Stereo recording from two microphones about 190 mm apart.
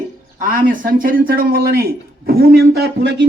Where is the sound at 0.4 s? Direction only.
45° right (ahead or behind).